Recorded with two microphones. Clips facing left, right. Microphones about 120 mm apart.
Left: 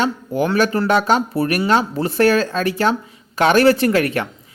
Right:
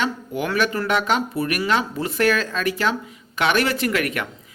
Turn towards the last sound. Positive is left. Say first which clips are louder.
# left 6 dB
turn(degrees=30)  # may be behind; listen again after turning